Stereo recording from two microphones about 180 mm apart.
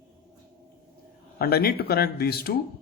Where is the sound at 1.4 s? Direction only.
60° left (ahead or behind).